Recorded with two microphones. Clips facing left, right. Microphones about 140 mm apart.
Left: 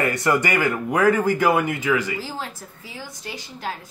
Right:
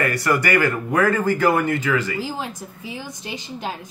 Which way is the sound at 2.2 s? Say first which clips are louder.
Right 4 dB; 15° right (ahead or behind).